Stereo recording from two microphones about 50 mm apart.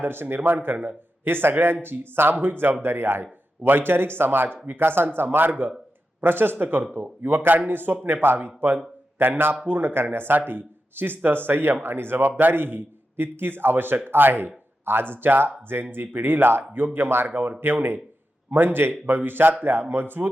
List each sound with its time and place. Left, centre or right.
0.0 s a man's voice: right